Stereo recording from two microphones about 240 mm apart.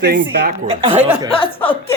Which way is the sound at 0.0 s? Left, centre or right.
Right.